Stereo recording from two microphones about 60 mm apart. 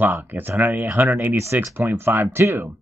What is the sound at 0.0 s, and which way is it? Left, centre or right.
Speech, right.